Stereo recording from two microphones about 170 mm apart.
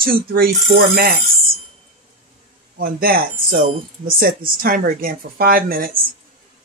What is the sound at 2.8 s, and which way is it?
A woman's voice, 60° right (ahead or behind).